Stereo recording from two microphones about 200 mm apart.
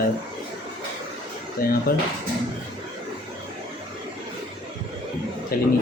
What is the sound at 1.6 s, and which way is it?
Speech, 45° left (ahead or behind).